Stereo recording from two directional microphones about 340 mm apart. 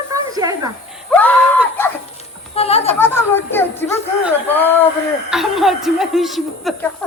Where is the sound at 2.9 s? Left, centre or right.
Centre.